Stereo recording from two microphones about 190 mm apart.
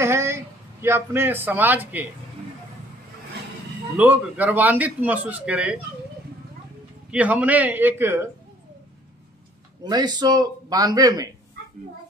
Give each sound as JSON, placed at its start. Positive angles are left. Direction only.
{"t": 0.0, "sound": "speech", "side_deg": -15}
{"t": 3.9, "sound": "a man's voice", "side_deg": -10}
{"t": 7.1, "sound": "a man's voice", "side_deg": -5}
{"t": 9.8, "sound": "speech", "side_deg": -20}